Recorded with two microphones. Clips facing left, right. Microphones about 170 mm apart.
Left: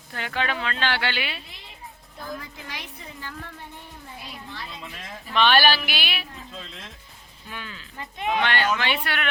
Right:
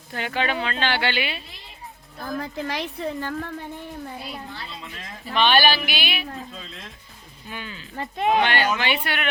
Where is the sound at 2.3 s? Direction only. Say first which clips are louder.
Right 10 dB; 60° right (ahead or behind).